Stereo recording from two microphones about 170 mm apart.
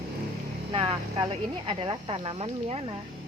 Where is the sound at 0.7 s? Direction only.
30° right (ahead or behind).